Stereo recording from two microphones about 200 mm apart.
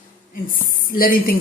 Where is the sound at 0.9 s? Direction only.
45° left (ahead or behind).